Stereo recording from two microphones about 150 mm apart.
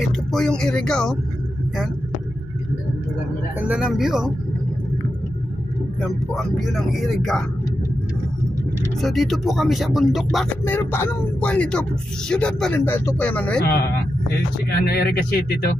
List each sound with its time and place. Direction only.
0.0 s speech: centre (ahead or behind)
3.6 s speech: 5° right (ahead or behind)
5.9 s speech: centre (ahead or behind)
9.0 s speech: centre (ahead or behind)
10.6 s speech: 15° left (ahead or behind)
14.8 s speech: 90° left